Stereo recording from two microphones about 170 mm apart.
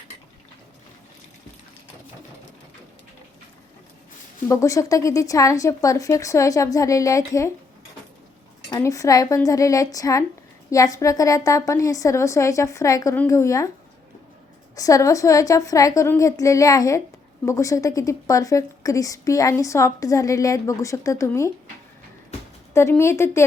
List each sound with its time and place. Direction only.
4.4 s speech: 20° left (ahead or behind)
8.7 s a woman's voice: 20° left (ahead or behind)
14.8 s speech: 20° left (ahead or behind)
22.7 s a woman's voice: 15° left (ahead or behind)